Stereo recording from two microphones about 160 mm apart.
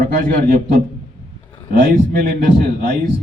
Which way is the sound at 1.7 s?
60° right (ahead or behind).